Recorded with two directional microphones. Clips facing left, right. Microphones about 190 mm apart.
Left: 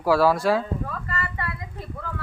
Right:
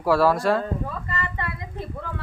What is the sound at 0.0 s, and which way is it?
Speech, centre (ahead or behind).